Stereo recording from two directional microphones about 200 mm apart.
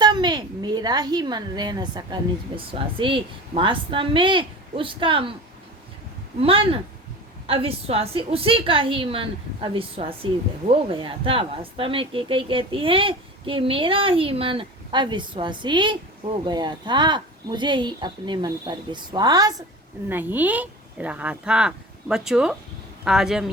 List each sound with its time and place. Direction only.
0.0 s a woman's voice: 20° right (ahead or behind)
6.4 s speech: 25° right (ahead or behind); by 23.5 s centre (ahead or behind)